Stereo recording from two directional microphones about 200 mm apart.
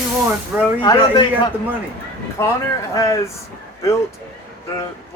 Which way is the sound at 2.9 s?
15° left (ahead or behind).